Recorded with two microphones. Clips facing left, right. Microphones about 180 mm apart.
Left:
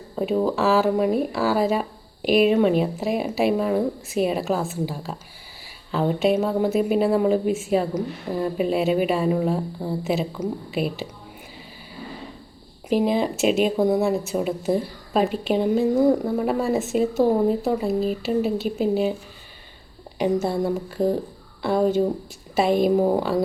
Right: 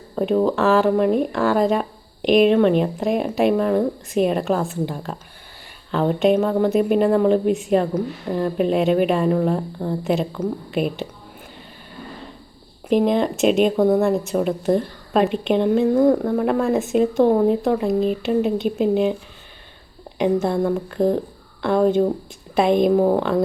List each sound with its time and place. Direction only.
0.5 s speech: centre (ahead or behind)
12.9 s speech: 5° left (ahead or behind)
20.1 s speech: 5° left (ahead or behind)
21.0 s speech: 20° right (ahead or behind)
21.6 s speech: 5° left (ahead or behind)